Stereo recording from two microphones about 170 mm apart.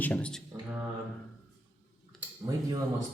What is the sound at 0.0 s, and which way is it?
Speech, 5° left (ahead or behind).